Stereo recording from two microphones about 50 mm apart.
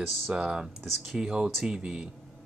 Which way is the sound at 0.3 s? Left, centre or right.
Centre.